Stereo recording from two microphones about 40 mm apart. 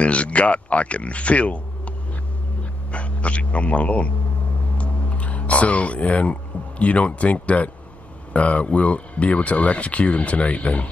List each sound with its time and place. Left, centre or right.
0.0 s speech: left
2.9 s speech: left
4.7 s music: left
6.8 s speech: left